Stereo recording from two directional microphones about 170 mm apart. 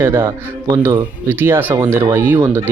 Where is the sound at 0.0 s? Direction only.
15° right (ahead or behind).